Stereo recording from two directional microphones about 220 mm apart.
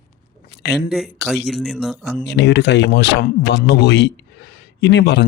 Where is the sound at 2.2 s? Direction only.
50° left (ahead or behind).